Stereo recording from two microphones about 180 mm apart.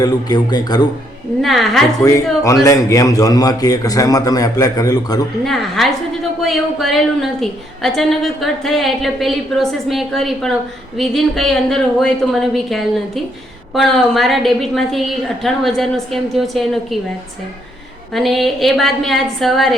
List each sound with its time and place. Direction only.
0.0 s a man's voice: 20° left (ahead or behind)
1.4 s a woman's voice: centre (ahead or behind)
2.0 s a man's voice: 10° left (ahead or behind)
5.5 s a woman's voice: centre (ahead or behind)
18.1 s a woman's voice: centre (ahead or behind)